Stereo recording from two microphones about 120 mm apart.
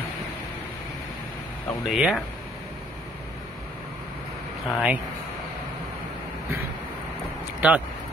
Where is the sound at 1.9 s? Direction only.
5° right (ahead or behind).